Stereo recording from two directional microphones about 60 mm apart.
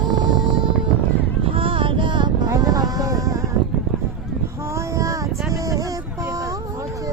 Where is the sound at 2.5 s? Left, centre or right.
Right.